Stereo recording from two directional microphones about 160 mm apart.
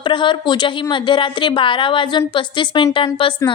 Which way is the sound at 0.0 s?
30° left (ahead or behind).